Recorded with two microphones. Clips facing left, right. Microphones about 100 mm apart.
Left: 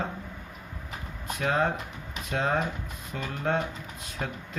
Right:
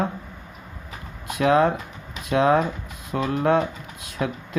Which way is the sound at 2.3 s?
85° right.